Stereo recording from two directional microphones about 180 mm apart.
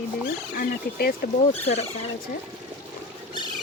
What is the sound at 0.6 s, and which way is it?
Speech, 55° left (ahead or behind).